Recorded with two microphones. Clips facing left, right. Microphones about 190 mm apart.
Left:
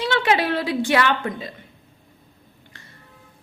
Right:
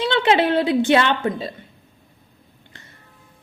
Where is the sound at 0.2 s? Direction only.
25° right (ahead or behind).